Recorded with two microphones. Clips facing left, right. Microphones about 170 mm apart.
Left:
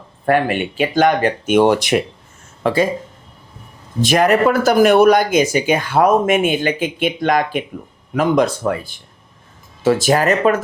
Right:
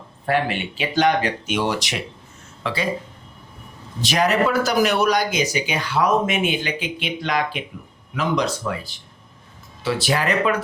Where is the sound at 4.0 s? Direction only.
50° left (ahead or behind).